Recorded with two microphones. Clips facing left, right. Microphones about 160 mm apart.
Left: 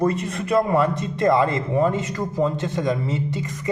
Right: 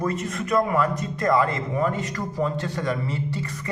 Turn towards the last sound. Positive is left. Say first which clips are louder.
# left 2 dB
turn(degrees=20)  # may be behind; listen again after turning